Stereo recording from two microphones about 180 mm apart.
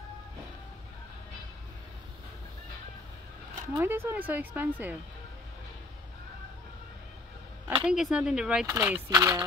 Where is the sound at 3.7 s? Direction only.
10° right (ahead or behind).